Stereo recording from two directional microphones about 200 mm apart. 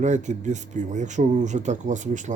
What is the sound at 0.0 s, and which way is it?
Speech, 35° right (ahead or behind).